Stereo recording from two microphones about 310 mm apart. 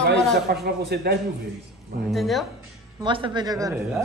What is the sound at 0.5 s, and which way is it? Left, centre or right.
Speech, right.